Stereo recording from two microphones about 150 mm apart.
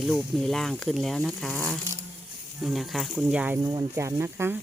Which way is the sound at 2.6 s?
Centre (ahead or behind).